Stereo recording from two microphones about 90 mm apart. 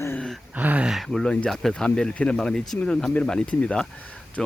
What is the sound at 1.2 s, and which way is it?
Speech, 10° left (ahead or behind).